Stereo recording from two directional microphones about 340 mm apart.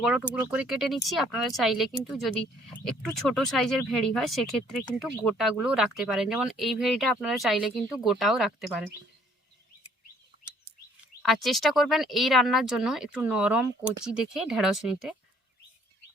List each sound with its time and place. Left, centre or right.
0.0 s speech: centre
11.2 s speech: centre